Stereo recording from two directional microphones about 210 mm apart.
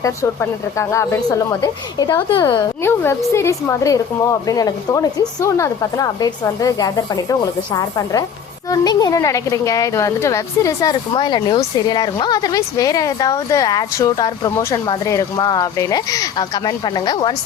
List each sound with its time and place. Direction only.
0.0 s speech: 15° left (ahead or behind)